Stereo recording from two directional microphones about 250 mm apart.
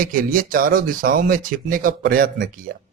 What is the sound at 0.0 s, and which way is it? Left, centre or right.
Speech, right.